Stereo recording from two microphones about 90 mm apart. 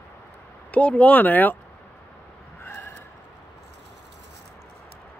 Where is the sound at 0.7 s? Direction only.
15° left (ahead or behind).